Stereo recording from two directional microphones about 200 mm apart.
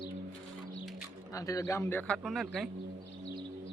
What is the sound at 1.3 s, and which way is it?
A man's voice, 15° left (ahead or behind).